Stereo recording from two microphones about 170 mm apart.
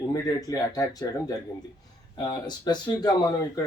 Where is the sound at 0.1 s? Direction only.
20° left (ahead or behind).